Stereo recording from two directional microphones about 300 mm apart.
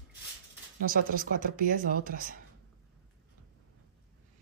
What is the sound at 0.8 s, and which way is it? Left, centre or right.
Speech, right.